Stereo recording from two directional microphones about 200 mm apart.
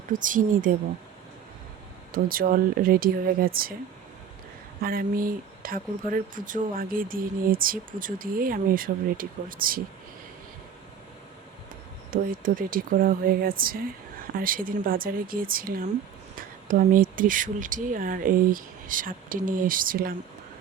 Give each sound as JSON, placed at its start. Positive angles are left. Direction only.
{"t": 0.1, "sound": "speech", "side_deg": -40}
{"t": 2.1, "sound": "speech", "side_deg": -45}
{"t": 4.8, "sound": "speech", "side_deg": -45}
{"t": 12.1, "sound": "speech", "side_deg": -45}